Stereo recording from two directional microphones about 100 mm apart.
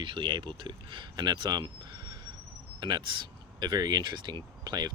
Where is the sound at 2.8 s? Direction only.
50° right (ahead or behind).